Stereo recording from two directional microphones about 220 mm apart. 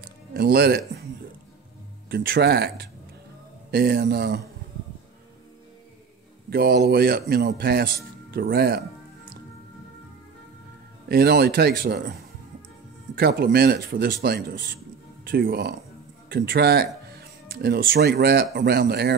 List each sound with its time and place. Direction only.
0.0 s a sound: 45° right (ahead or behind)
2.0 s speech: 50° right (ahead or behind)
6.5 s speech: 50° right (ahead or behind)
11.1 s speech: 45° right (ahead or behind)
13.1 s speech: 45° right (ahead or behind)